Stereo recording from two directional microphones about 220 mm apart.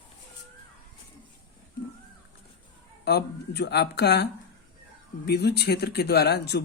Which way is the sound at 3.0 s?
50° left (ahead or behind).